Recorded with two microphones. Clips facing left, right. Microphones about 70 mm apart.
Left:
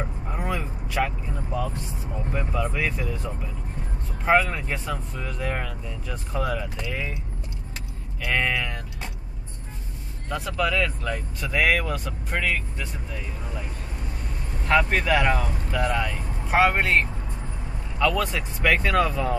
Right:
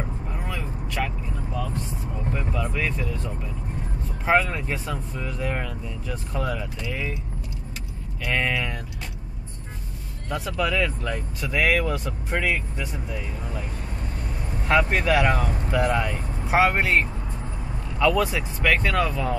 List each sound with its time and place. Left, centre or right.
0.3 s vehicle: centre
2.3 s speech: centre
8.2 s speech: centre
10.6 s speech: centre
14.7 s speech: centre
18.6 s speech: centre